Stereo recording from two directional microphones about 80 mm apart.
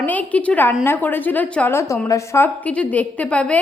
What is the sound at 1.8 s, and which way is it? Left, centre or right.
Speech, left.